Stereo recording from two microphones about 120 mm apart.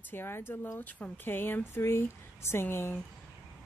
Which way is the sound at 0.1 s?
20° left (ahead or behind).